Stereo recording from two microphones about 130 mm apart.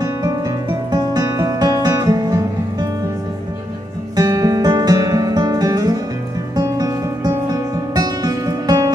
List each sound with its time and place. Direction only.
0.0 s music: 30° right (ahead or behind)
4.2 s music: 25° right (ahead or behind)